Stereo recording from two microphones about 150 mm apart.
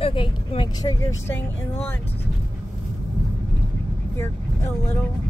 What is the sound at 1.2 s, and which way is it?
Speech, 15° left (ahead or behind).